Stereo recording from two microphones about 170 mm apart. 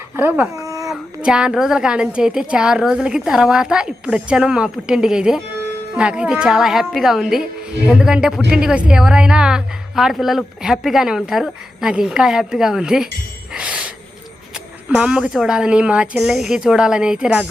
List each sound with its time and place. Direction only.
0.2 s a sound: 10° right (ahead or behind)
0.9 s a woman's voice: 5° right (ahead or behind)
13.5 s gasp: 5° right (ahead or behind)
14.8 s a woman's voice: 5° right (ahead or behind)